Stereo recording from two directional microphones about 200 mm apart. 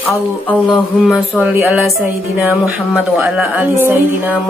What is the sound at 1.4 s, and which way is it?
Speech, 10° right (ahead or behind).